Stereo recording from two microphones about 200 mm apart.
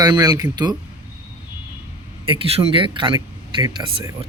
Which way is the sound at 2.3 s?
25° right (ahead or behind).